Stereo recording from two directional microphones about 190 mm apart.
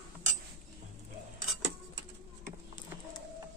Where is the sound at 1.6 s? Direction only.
70° right (ahead or behind).